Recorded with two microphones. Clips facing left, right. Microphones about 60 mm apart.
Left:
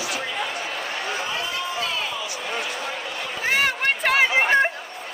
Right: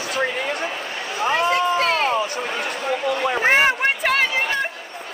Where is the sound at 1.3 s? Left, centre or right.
Right.